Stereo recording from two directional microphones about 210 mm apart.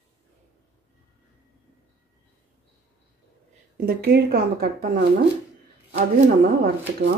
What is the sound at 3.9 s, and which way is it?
Speech, 45° right (ahead or behind).